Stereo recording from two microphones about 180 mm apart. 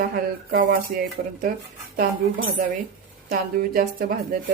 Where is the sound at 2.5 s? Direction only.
45° right (ahead or behind).